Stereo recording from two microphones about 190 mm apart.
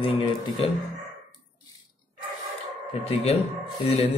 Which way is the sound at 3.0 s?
30° left (ahead or behind).